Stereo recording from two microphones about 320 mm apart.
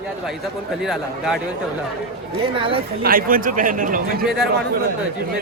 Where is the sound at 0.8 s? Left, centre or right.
Centre.